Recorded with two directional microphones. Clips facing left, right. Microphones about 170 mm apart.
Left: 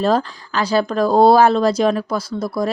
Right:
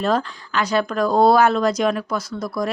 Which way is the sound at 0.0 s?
35° left (ahead or behind).